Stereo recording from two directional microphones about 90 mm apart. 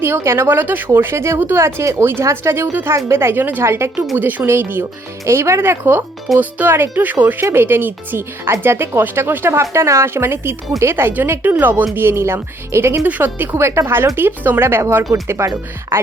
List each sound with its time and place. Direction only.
0.0 s speech: 30° right (ahead or behind)